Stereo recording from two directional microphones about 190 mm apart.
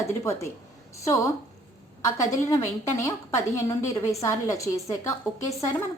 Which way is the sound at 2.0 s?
15° left (ahead or behind).